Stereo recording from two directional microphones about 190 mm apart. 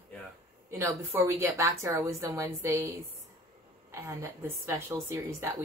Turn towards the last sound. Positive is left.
turn(degrees=-15)  # may be behind; listen again after turning